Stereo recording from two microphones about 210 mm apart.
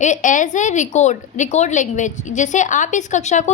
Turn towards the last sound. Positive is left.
turn(degrees=35)  # may be behind; listen again after turning